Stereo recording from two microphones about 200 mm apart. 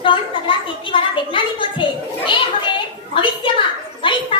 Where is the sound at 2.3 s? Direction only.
25° left (ahead or behind).